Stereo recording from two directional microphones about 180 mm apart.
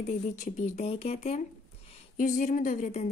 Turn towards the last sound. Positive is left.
turn(degrees=40)  # may be behind; listen again after turning